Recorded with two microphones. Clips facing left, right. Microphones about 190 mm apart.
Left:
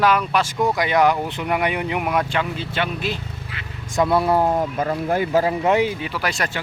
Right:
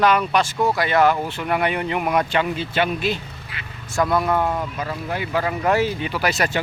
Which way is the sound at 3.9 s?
25° left (ahead or behind).